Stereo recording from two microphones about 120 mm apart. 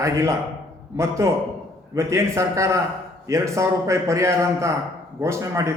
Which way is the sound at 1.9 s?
25° right (ahead or behind).